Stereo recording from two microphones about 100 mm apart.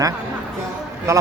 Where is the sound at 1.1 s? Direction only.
30° right (ahead or behind).